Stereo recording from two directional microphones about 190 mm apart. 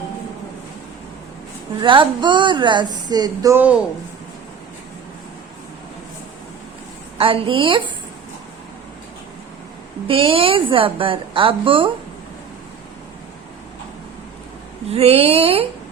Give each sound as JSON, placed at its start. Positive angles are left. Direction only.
{"t": 1.8, "sound": "speech", "side_deg": -25}
{"t": 7.2, "sound": "speech", "side_deg": -30}
{"t": 10.1, "sound": "speech", "side_deg": -30}
{"t": 14.8, "sound": "speech", "side_deg": -30}